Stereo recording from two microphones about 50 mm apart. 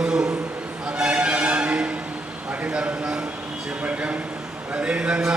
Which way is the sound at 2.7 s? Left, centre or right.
Centre.